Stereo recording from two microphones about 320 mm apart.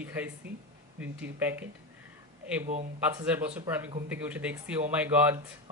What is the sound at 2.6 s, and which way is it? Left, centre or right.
Speech, right.